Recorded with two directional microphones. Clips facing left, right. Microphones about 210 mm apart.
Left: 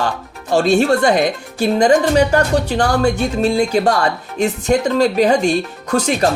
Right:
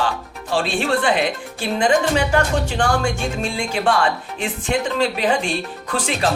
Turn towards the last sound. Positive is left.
turn(degrees=40)  # may be behind; listen again after turning